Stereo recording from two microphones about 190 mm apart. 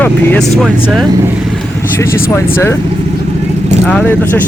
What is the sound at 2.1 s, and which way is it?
Speech, 50° left (ahead or behind).